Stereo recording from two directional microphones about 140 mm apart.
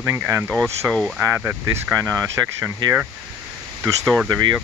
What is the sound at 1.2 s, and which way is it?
Speech, 15° right (ahead or behind).